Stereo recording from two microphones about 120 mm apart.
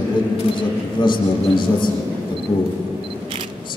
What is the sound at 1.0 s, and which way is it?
Speech, 40° left (ahead or behind).